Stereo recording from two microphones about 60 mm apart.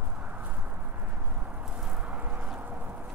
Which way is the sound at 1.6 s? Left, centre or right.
Centre.